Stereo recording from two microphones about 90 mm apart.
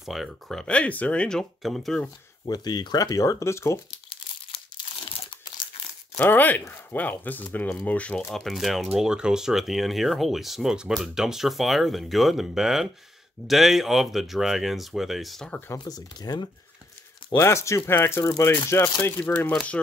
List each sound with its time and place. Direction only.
0.0 s speech: centre (ahead or behind)
2.4 s speech: 50° left (ahead or behind); by 3.8 s 30° left (ahead or behind)
4.7 s crumpling: 55° left (ahead or behind)
6.1 s speech: 20° left (ahead or behind)
8.3 s speech: 5° left (ahead or behind)
15.8 s speech: 50° left (ahead or behind)
17.4 s speech: 30° left (ahead or behind)
19.2 s speech: 15° left (ahead or behind)